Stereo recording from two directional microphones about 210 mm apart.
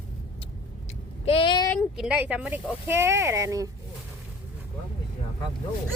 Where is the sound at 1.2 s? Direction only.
25° left (ahead or behind).